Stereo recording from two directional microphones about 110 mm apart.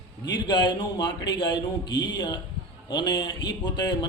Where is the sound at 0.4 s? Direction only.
40° left (ahead or behind).